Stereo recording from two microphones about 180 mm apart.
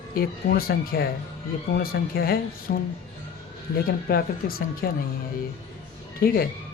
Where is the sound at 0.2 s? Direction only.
55° left (ahead or behind).